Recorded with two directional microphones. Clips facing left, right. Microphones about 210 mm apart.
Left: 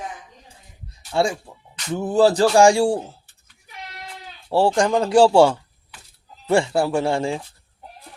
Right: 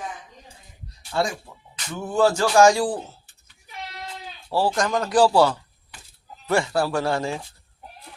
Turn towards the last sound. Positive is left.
turn(degrees=25)  # may be behind; listen again after turning